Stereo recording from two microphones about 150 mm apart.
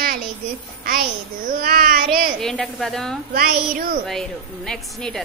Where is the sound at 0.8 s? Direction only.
75° right (ahead or behind).